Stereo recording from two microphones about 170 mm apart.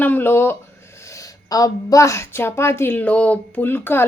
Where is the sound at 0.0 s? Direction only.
10° left (ahead or behind).